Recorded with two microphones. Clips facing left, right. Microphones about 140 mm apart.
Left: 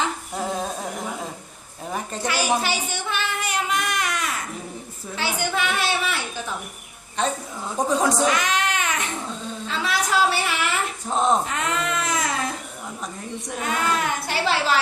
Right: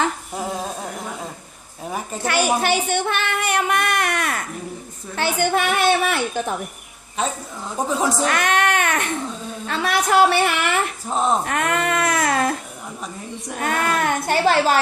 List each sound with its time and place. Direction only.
0.3 s a sound: 5° right (ahead or behind)
2.2 s a woman's voice: 55° right (ahead or behind)
2.6 s a sound: 55° right (ahead or behind)
5.1 s a woman's voice: 55° right (ahead or behind)
7.2 s speech: 10° right (ahead or behind)
8.3 s baby cry: 60° right (ahead or behind)
9.6 s a woman's voice: 60° right (ahead or behind)
11.1 s speech: centre (ahead or behind)
11.4 s speech: 60° right (ahead or behind)
13.6 s a woman's voice: 55° right (ahead or behind)